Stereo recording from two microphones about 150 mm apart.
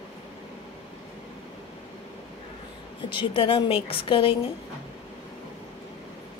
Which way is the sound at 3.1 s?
35° left (ahead or behind).